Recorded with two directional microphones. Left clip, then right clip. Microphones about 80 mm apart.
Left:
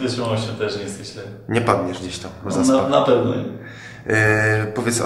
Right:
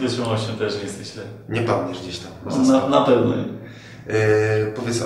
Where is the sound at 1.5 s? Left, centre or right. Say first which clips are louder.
Left 3 dB; left.